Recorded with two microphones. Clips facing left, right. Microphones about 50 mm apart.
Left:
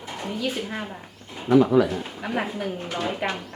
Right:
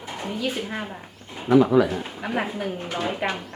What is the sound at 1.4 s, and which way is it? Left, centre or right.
Speech, right.